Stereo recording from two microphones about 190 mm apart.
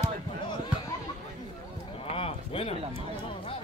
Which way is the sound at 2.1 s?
30° left (ahead or behind).